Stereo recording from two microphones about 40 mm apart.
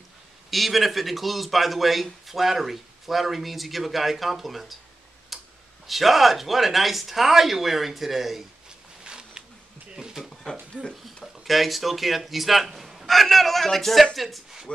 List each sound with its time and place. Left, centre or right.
0.5 s speech: centre
5.3 s tick-tock: centre
5.9 s speech: centre
9.0 s a sound: right
9.9 s speech: centre
10.3 s a sound: centre
10.7 s speech: centre
11.4 s speech: centre